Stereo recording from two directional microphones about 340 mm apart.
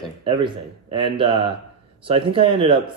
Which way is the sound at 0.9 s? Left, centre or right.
Centre.